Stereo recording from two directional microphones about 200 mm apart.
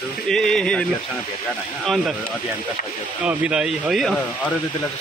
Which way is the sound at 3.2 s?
5° right (ahead or behind).